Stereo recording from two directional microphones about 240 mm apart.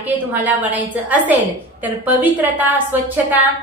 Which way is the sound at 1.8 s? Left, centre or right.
Centre.